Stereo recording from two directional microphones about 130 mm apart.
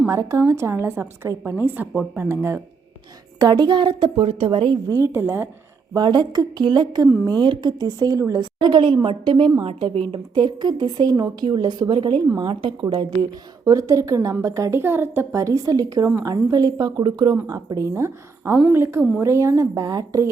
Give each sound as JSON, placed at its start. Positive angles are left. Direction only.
{"t": 0.1, "sound": "a woman's voice", "side_deg": -25}
{"t": 3.3, "sound": "a woman's voice", "side_deg": -30}
{"t": 4.9, "sound": "a woman's voice", "side_deg": -20}
{"t": 5.9, "sound": "a woman's voice", "side_deg": -35}
{"t": 10.1, "sound": "a woman's voice", "side_deg": -35}